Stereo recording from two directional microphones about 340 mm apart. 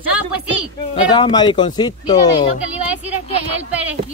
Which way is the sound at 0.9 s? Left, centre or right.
Centre.